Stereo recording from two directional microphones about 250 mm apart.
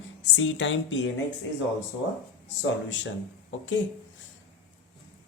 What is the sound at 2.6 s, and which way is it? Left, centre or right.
Speech, left.